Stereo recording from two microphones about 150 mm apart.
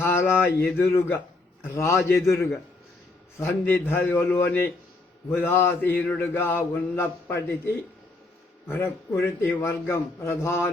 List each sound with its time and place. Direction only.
0.0 s mantra: 15° left (ahead or behind)
1.6 s a man's voice: 20° left (ahead or behind)
3.3 s mantra: 15° left (ahead or behind)